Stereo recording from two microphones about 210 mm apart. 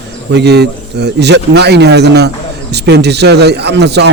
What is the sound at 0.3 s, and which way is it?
A man's voice, 50° right (ahead or behind).